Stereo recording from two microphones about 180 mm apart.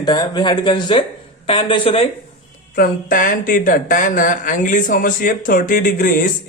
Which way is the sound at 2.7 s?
50° left (ahead or behind).